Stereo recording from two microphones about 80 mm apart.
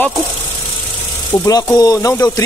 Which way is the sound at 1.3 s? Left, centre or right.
Left.